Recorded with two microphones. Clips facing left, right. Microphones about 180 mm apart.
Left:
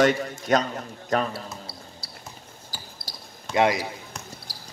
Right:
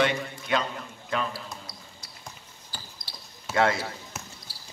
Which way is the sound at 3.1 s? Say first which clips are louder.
Left 4 dB; 40° left (ahead or behind).